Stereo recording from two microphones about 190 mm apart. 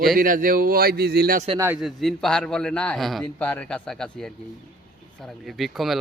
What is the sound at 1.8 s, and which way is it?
A man's voice, centre (ahead or behind).